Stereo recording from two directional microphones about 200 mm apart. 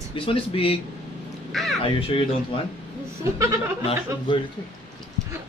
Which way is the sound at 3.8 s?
25° left (ahead or behind).